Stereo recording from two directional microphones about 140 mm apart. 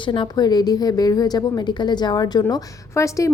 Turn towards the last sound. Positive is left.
turn(degrees=20)  # may be behind; listen again after turning